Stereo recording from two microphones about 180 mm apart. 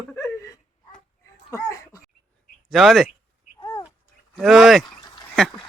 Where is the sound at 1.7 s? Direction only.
15° left (ahead or behind).